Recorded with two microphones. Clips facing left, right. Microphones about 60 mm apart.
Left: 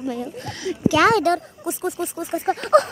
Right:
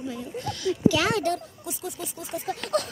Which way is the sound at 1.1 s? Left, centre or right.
Left.